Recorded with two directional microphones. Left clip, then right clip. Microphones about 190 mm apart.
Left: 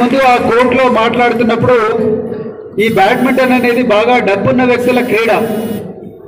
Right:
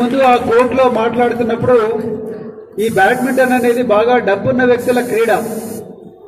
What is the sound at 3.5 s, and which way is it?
A man's voice, 55° right (ahead or behind).